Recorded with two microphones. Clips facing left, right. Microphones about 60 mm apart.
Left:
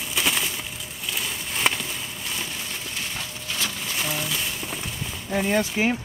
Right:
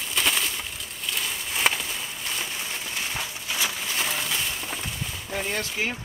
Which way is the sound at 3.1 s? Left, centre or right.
Centre.